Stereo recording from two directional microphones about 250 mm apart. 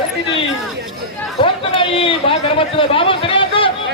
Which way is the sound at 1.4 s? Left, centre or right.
Left.